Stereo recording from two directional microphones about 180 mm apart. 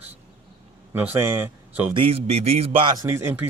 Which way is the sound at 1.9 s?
30° right (ahead or behind).